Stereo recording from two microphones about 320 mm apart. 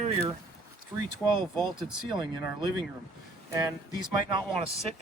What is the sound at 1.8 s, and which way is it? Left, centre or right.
Speech, centre.